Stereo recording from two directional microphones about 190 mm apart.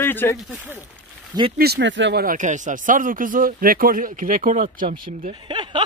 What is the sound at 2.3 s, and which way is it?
Speech, 40° right (ahead or behind).